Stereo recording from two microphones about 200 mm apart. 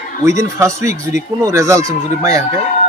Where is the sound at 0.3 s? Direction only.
15° right (ahead or behind).